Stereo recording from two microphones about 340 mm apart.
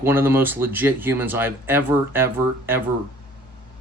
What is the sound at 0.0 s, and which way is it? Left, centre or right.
Speech, centre.